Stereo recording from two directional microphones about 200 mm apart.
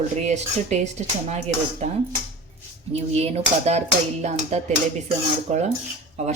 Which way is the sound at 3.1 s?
30° right (ahead or behind).